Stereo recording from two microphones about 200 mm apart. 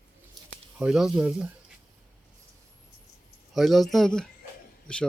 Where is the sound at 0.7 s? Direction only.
5° right (ahead or behind).